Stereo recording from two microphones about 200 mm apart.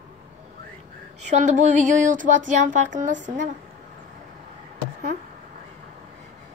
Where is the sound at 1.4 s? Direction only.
40° right (ahead or behind).